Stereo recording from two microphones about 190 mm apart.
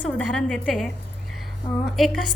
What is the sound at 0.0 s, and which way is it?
A woman's voice, 5° left (ahead or behind).